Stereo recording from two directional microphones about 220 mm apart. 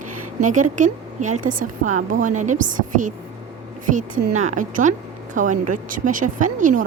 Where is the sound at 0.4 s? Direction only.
35° right (ahead or behind).